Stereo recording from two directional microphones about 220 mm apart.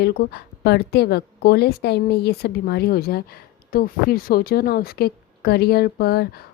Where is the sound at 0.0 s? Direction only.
45° left (ahead or behind).